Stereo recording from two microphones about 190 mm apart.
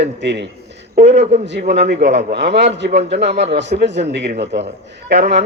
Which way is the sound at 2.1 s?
35° right (ahead or behind).